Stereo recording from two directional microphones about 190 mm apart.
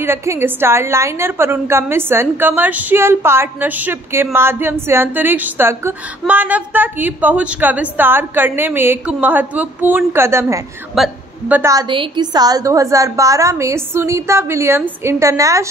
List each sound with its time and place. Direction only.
0.0 s a woman's voice: 15° right (ahead or behind)